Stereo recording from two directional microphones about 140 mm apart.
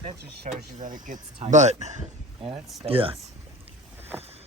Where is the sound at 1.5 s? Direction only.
55° right (ahead or behind).